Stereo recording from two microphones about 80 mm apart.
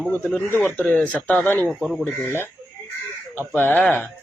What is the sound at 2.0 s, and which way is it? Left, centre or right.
Speech, left.